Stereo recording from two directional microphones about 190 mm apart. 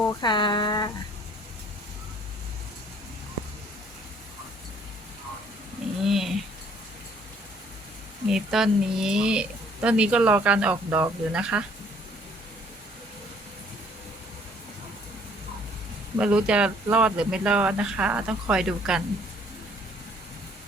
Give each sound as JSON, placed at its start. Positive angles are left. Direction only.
{"t": 0.2, "sound": "speech", "side_deg": 25}
{"t": 6.1, "sound": "a sound", "side_deg": 0}
{"t": 8.3, "sound": "speech", "side_deg": -5}
{"t": 16.1, "sound": "speech", "side_deg": -5}